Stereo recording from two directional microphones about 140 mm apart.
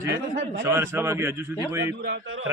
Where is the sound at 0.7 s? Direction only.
20° right (ahead or behind).